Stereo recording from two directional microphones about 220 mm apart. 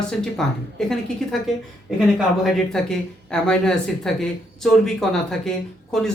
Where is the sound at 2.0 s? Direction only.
Centre (ahead or behind).